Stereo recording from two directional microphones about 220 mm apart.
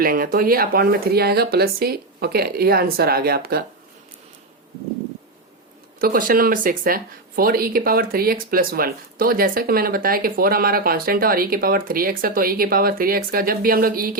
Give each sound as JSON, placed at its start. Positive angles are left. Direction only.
{"t": 0.0, "sound": "speech", "side_deg": -40}
{"t": 6.0, "sound": "speech", "side_deg": -40}